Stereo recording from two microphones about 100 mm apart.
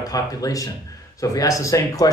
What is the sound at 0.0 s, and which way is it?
Speech, 35° left (ahead or behind).